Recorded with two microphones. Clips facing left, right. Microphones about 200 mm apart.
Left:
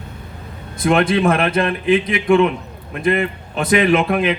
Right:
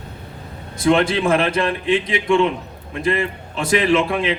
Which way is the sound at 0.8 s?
30° right (ahead or behind).